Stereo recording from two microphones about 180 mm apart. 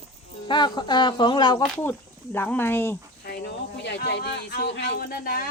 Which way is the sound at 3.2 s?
70° left (ahead or behind).